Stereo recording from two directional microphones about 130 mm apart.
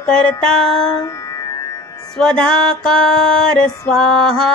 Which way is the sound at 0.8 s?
30° left (ahead or behind).